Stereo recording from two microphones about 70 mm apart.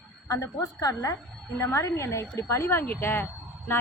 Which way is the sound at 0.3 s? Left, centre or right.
Left.